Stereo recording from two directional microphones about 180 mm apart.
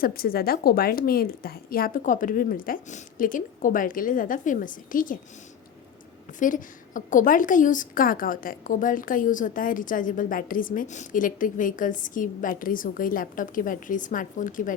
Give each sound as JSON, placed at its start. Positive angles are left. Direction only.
{"t": 0.0, "sound": "a woman's voice", "side_deg": 55}
{"t": 6.4, "sound": "a woman's voice", "side_deg": 45}